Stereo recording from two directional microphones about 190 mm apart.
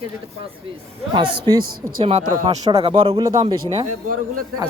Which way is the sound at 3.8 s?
45° right (ahead or behind).